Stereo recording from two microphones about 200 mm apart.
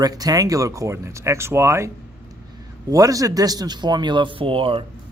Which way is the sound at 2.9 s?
15° right (ahead or behind).